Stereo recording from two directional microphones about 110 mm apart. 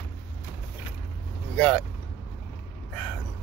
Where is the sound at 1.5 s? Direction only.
5° left (ahead or behind).